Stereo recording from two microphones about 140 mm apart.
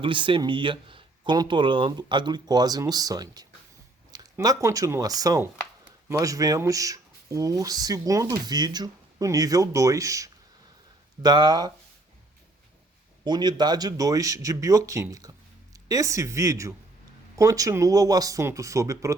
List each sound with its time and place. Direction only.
0.0 s speech: 35° right (ahead or behind)
13.2 s speech: 30° right (ahead or behind)